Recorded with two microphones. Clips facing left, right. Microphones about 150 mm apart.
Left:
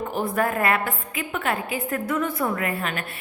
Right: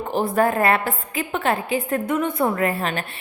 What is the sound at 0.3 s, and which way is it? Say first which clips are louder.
A woman's voice: right 4 dB; 30° right (ahead or behind).